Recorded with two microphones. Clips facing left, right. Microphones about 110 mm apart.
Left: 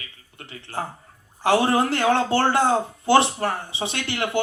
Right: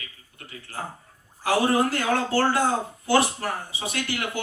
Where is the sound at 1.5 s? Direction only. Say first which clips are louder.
Left 2 dB; 25° left (ahead or behind).